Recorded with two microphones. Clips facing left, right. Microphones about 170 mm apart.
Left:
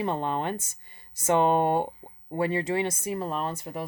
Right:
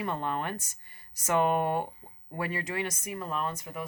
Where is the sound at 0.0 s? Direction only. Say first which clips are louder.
Left 4 dB; 25° left (ahead or behind).